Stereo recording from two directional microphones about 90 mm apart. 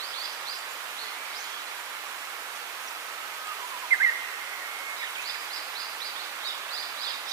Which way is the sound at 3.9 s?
40° right (ahead or behind).